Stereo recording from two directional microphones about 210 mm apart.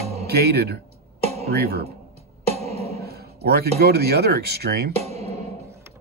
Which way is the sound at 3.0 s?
50° right (ahead or behind).